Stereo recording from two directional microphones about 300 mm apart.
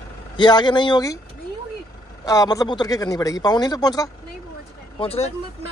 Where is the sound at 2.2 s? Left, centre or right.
Centre.